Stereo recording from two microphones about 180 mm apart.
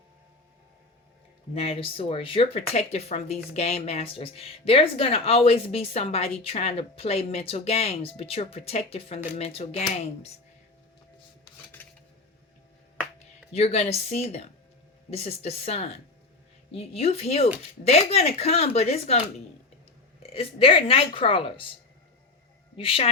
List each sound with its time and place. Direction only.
1.5 s speech: 30° left (ahead or behind)
11.8 s a sound: 10° left (ahead or behind)
13.1 s speech: 35° left (ahead or behind)
20.1 s speech: 30° left (ahead or behind)
22.8 s speech: 30° left (ahead or behind)